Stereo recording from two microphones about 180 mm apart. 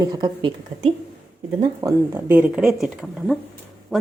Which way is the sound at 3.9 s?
Centre (ahead or behind).